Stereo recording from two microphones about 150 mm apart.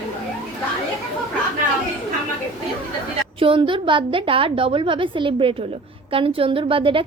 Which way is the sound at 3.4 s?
35° right (ahead or behind).